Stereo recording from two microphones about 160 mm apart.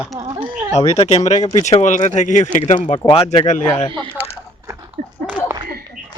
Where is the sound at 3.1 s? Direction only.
40° left (ahead or behind).